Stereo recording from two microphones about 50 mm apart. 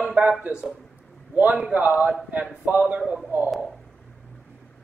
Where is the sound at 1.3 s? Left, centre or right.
Right.